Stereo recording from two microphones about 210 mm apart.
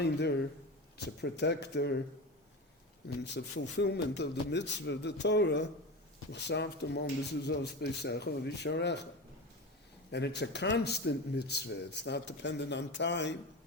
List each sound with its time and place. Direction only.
0.0 s speech: 50° left (ahead or behind)
3.3 s speech: 55° left (ahead or behind)
10.1 s speech: 55° left (ahead or behind)